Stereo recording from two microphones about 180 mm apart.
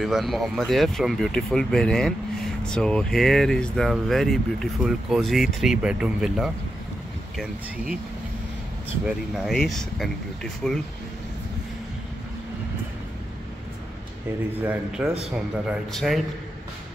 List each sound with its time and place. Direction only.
0.0 s speech: centre (ahead or behind)
9.0 s speech: centre (ahead or behind)
14.6 s a man's voice: 5° right (ahead or behind)